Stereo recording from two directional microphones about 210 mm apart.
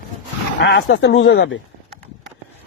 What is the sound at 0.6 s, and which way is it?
Speech, 60° left (ahead or behind).